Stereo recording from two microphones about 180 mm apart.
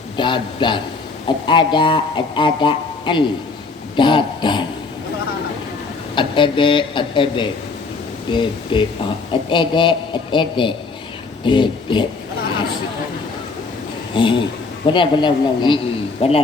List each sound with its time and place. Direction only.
0.2 s speech: 25° left (ahead or behind)
6.1 s speech: 25° left (ahead or behind)
14.2 s speech: 30° left (ahead or behind)